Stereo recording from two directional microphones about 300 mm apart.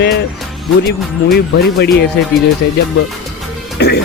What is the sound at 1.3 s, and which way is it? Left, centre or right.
Speech, left.